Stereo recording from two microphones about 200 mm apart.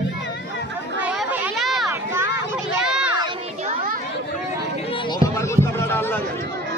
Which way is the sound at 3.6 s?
45° right (ahead or behind).